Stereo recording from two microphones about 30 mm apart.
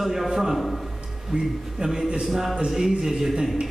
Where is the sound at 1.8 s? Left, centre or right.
Right.